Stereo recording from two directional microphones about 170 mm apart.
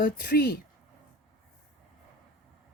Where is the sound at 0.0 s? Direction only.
65° left (ahead or behind).